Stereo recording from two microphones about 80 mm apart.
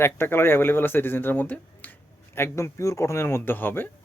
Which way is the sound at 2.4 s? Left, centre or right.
Left.